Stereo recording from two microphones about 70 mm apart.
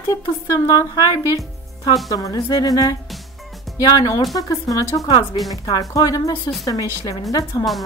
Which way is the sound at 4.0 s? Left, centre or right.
Left.